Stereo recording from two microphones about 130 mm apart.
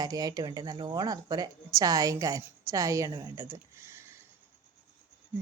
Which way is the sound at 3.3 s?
20° right (ahead or behind).